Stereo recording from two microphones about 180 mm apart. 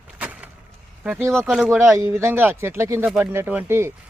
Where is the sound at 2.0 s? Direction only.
15° right (ahead or behind).